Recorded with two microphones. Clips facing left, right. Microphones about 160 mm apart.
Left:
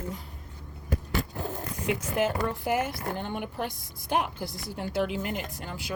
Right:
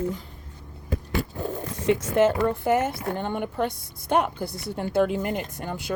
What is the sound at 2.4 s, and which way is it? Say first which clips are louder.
Speech: right 6 dB; 65° right (ahead or behind).